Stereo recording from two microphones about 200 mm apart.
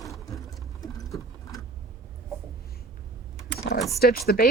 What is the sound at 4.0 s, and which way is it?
Speech, 50° left (ahead or behind).